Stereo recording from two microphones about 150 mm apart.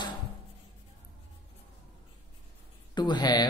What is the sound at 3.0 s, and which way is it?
Speech, 30° left (ahead or behind).